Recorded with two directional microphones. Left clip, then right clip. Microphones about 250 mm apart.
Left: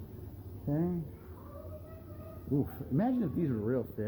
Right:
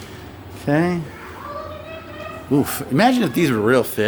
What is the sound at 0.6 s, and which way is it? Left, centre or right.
Speech, right.